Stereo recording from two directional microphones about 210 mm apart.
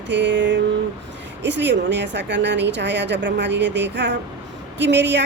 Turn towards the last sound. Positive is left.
turn(degrees=-55)  # may be behind; listen again after turning